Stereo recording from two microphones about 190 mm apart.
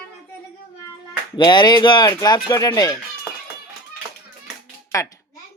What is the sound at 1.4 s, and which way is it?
Speech, 25° left (ahead or behind).